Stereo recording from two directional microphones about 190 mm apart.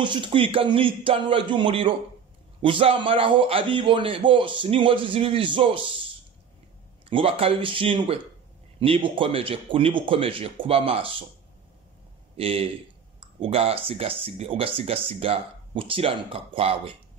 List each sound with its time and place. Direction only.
0.0 s speech: 25° right (ahead or behind)
7.1 s speech: 30° right (ahead or behind)
12.4 s a man's voice: 30° right (ahead or behind)